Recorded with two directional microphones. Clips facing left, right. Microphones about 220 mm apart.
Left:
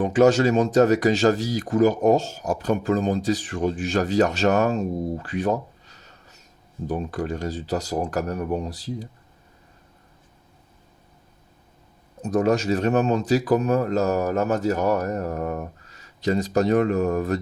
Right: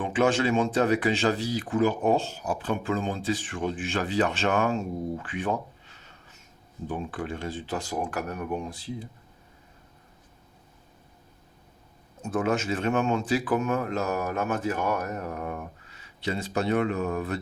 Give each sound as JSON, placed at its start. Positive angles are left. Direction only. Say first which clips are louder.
{"t": 0.0, "sound": "speech", "louder": "left 7 dB", "side_deg": 40}
{"t": 12.2, "sound": "speech", "louder": "left 6 dB", "side_deg": 40}